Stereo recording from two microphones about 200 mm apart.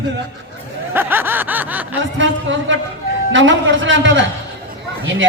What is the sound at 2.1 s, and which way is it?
A man's voice, 70° right (ahead or behind).